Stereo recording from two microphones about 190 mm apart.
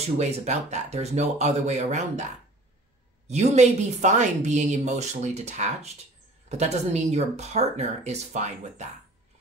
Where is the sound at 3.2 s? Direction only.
35° right (ahead or behind).